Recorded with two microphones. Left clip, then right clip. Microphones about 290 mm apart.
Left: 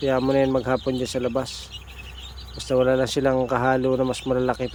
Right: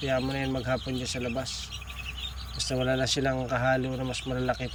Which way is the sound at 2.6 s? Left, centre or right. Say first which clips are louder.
Left 8 dB; centre.